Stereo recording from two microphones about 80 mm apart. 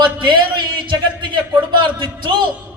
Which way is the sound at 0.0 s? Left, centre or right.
Right.